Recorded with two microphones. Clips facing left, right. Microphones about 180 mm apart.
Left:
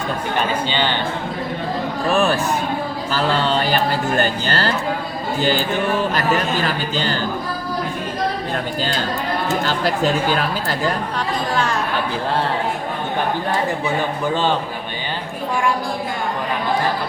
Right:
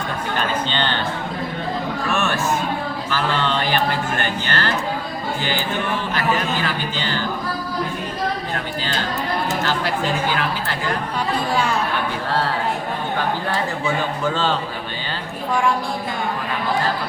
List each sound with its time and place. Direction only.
0.7 s speech: 10° left (ahead or behind)
2.0 s speech: 35° left (ahead or behind)